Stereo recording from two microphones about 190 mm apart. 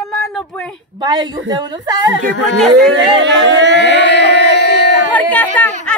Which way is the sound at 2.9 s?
75° right (ahead or behind).